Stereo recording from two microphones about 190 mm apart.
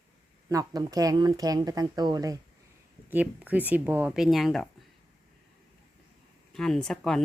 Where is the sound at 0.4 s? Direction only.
20° right (ahead or behind).